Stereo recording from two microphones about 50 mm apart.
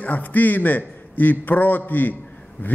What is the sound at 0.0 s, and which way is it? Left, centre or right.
A man's voice, left.